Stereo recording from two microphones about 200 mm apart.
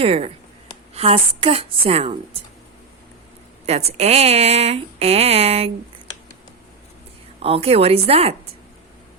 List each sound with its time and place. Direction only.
0.0 s a woman's voice: 30° right (ahead or behind)
3.7 s speech: 30° right (ahead or behind)
7.3 s a woman's voice: 30° right (ahead or behind)